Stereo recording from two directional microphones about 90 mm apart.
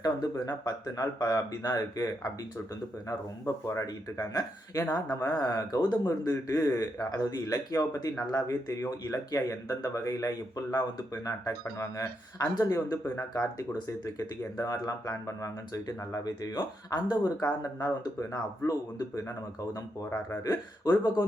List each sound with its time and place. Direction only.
0.0 s speech: 45° left (ahead or behind)
3.1 s a man's voice: 35° left (ahead or behind)
20.4 s speech: 45° left (ahead or behind)